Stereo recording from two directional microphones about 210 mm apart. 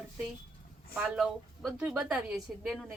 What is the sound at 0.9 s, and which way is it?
A woman's voice, 5° right (ahead or behind).